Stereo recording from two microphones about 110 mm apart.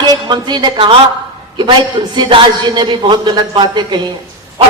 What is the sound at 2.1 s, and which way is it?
A man's voice, 45° right (ahead or behind).